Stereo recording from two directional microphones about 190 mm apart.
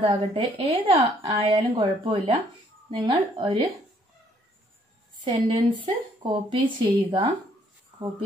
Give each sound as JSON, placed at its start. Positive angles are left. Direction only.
{"t": 0.0, "sound": "a woman's voice", "side_deg": -25}
{"t": 5.2, "sound": "a woman's voice", "side_deg": -25}